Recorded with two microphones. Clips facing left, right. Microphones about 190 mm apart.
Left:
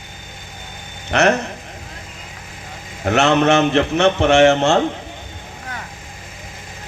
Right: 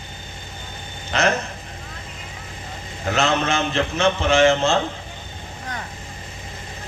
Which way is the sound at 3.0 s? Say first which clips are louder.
Left 7 dB; 65° left (ahead or behind).